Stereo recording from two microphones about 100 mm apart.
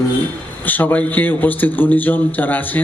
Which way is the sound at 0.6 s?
20° left (ahead or behind).